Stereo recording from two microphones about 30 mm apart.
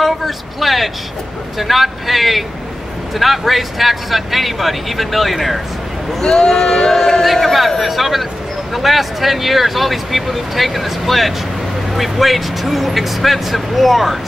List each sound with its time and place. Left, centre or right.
0.0 s speech: centre
6.2 s speech: centre